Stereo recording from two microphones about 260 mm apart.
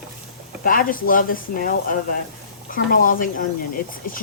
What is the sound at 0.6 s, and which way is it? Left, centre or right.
Speech, left.